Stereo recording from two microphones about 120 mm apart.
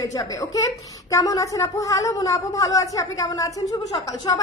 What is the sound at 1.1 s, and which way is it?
A woman's voice, 30° left (ahead or behind).